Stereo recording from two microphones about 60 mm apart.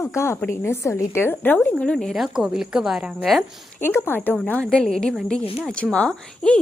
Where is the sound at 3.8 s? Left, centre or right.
Left.